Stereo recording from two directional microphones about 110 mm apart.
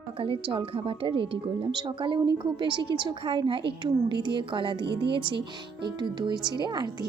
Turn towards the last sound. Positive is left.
turn(degrees=-40)  # may be behind; listen again after turning